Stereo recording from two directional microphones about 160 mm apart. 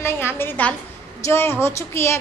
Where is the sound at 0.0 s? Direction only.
15° left (ahead or behind).